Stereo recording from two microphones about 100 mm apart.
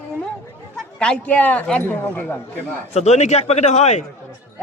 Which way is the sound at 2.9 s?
90° left.